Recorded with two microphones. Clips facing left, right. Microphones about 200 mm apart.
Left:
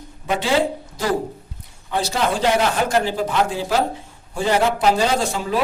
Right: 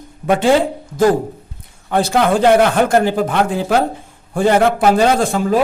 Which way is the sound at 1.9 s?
55° right (ahead or behind).